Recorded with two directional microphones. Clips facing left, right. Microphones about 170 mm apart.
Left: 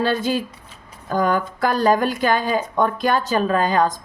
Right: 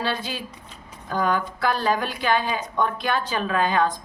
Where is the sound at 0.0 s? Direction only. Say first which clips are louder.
Left 8 dB; 45° left (ahead or behind).